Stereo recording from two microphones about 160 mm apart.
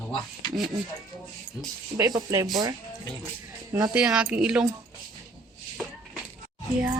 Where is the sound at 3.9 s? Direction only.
5° right (ahead or behind).